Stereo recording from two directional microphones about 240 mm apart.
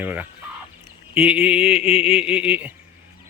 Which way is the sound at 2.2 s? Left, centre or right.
Centre.